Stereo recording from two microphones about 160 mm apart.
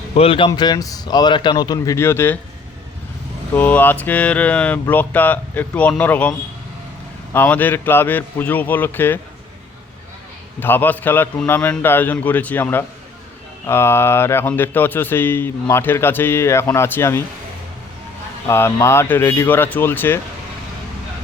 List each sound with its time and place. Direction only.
0.2 s a man's voice: 35° left (ahead or behind); by 2.4 s 15° left (ahead or behind)
3.5 s speech: 10° left (ahead or behind)
7.3 s speech: 10° left (ahead or behind)
10.6 s speech: 10° left (ahead or behind)
18.4 s speech: 15° left (ahead or behind)